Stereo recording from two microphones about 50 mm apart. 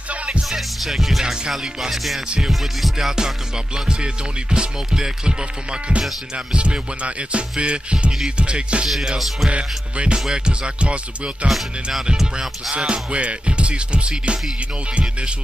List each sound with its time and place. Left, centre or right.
0.1 s music: right
0.4 s music: centre
1.2 s music: centre
1.5 s music: centre; by 8.8 s right
8.8 s music: centre
9.5 s music: right
11.4 s music: centre
12.7 s music: right